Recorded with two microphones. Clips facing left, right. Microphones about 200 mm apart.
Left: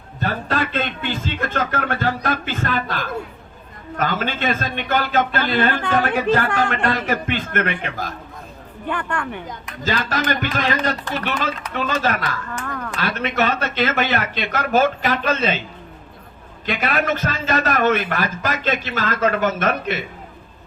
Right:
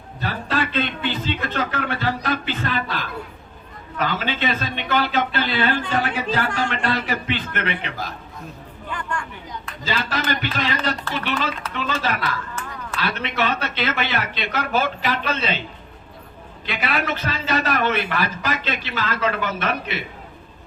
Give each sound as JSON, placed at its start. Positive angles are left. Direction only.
{"t": 0.2, "sound": "speech", "side_deg": 50}
{"t": 8.9, "sound": "a woman's voice", "side_deg": 60}
{"t": 9.8, "sound": "speech", "side_deg": 50}
{"t": 12.6, "sound": "a sound", "side_deg": 50}
{"t": 13.0, "sound": "speech", "side_deg": 45}
{"t": 16.6, "sound": "speech", "side_deg": 50}